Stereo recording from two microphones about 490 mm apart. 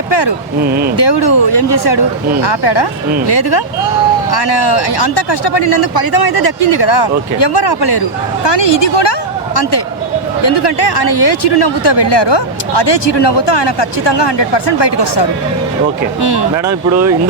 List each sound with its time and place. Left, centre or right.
0.1 s a sound: left
0.6 s speech: centre
0.9 s speech: left
10.4 s speech: left